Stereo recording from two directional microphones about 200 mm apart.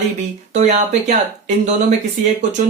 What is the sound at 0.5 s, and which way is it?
Speech, 35° right (ahead or behind).